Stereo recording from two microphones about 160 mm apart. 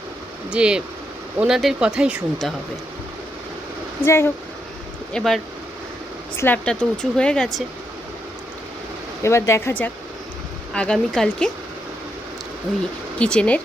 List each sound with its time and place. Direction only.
0.5 s speech: 5° right (ahead or behind)
4.0 s speech: 15° left (ahead or behind)
5.1 s speech: centre (ahead or behind)
6.3 s speech: 15° left (ahead or behind)
9.2 s speech: 15° left (ahead or behind)
12.7 s speech: centre (ahead or behind)